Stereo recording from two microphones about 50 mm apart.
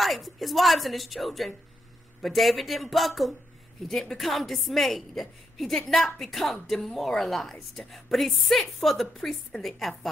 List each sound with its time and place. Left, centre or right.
0.0 s a woman's voice: centre